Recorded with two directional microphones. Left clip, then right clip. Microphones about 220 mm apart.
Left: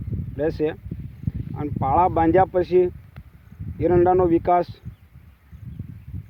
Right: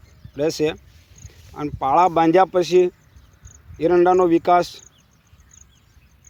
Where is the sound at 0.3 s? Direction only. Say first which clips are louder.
Right 3 dB; 10° right (ahead or behind).